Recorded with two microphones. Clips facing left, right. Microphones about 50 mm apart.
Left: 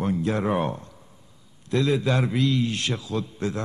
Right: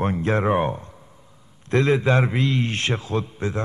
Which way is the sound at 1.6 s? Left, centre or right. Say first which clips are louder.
Right 4 dB; right.